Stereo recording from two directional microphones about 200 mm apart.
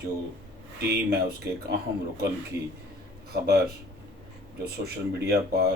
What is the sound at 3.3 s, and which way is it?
Speech, 55° right (ahead or behind).